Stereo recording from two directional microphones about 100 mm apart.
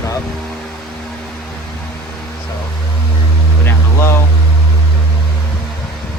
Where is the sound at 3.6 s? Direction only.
25° left (ahead or behind).